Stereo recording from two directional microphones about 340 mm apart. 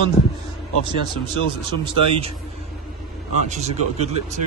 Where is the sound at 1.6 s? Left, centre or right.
Centre.